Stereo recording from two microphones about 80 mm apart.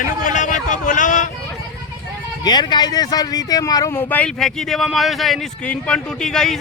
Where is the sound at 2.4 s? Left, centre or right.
Left.